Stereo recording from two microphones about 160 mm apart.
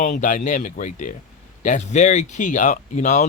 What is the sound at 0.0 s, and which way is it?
Speech, 50° left (ahead or behind).